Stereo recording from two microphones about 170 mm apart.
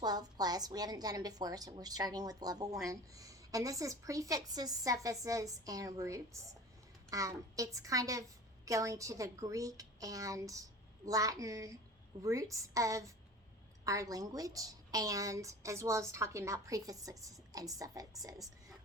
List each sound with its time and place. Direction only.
0.0 s a woman's voice: 25° right (ahead or behind)